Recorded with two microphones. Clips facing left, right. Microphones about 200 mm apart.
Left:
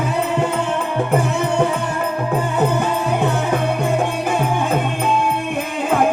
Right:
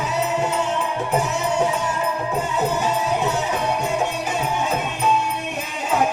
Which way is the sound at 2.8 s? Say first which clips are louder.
Left 3 dB; 55° left (ahead or behind).